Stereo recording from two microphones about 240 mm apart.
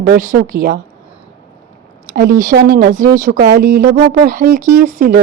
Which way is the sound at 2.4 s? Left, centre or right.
Right.